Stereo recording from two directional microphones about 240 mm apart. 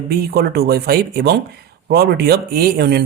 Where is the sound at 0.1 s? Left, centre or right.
Right.